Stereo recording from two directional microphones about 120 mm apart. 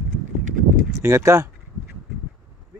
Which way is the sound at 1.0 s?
25° right (ahead or behind).